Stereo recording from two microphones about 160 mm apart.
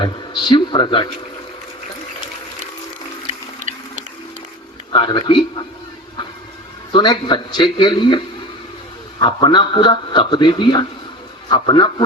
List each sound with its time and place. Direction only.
0.0 s a man's voice: 30° left (ahead or behind)
3.6 s a sound: 50° right (ahead or behind)
4.9 s a man's voice: 30° left (ahead or behind)
6.9 s a man's voice: 30° left (ahead or behind)